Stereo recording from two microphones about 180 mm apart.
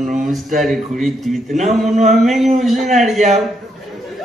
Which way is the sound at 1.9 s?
40° right (ahead or behind).